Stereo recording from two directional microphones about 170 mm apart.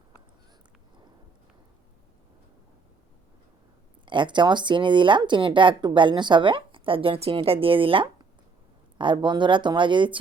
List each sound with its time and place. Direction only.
4.0 s speech: 30° right (ahead or behind)